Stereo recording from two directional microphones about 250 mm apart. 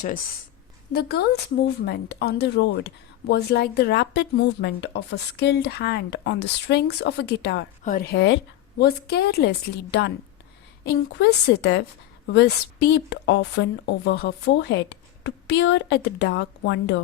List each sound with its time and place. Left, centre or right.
0.9 s a woman's voice: left